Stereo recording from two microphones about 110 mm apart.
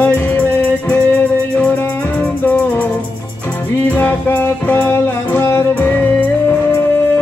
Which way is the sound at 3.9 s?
15° left (ahead or behind).